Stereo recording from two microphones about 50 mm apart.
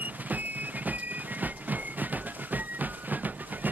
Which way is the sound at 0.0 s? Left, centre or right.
Right.